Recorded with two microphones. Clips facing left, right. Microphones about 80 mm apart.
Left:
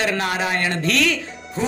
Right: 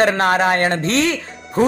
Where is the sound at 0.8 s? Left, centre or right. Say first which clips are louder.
Right 2 dB; right.